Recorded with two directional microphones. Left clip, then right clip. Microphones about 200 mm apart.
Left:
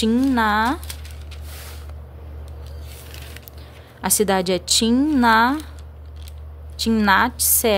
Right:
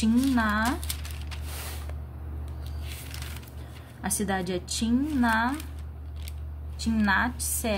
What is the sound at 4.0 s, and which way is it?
Speech, 60° left (ahead or behind).